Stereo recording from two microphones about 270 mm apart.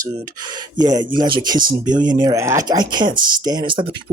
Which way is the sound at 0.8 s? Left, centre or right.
Centre.